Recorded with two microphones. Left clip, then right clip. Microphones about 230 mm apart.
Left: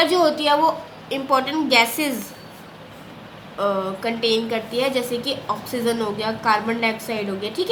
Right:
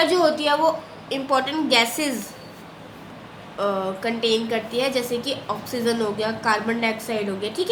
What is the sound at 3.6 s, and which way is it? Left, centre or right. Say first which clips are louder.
A woman's voice: left 2 dB; centre.